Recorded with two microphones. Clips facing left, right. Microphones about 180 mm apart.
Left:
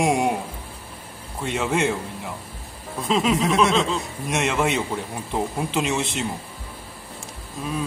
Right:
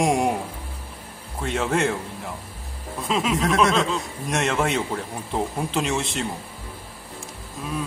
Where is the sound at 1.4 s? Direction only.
5° left (ahead or behind).